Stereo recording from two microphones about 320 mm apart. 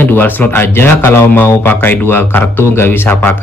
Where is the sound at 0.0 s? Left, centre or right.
Centre.